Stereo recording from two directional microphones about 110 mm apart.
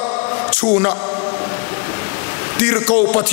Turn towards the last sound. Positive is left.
turn(degrees=20)  # may be behind; listen again after turning